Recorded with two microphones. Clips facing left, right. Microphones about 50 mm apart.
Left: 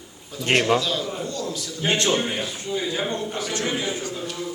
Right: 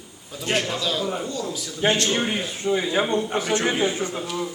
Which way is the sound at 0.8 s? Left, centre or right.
Centre.